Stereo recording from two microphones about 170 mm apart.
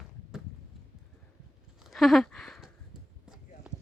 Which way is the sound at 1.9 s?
Centre (ahead or behind).